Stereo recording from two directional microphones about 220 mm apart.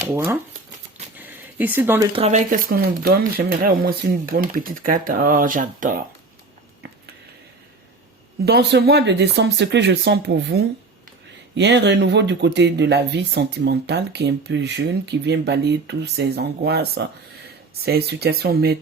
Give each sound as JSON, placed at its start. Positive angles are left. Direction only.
{"t": 0.0, "sound": "speech", "side_deg": -10}
{"t": 1.1, "sound": "a sound", "side_deg": -10}
{"t": 2.1, "sound": "speech", "side_deg": -30}
{"t": 8.4, "sound": "speech", "side_deg": -45}